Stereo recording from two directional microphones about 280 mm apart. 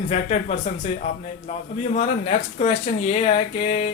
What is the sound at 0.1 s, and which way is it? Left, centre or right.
Speech, left.